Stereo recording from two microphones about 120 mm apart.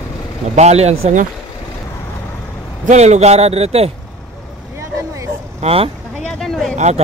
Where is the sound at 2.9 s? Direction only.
70° right (ahead or behind).